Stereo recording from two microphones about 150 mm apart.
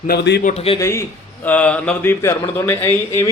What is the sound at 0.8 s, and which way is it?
Speech, 20° left (ahead or behind).